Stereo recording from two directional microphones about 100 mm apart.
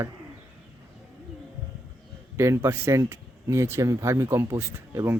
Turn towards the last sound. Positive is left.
turn(degrees=-25)  # may be behind; listen again after turning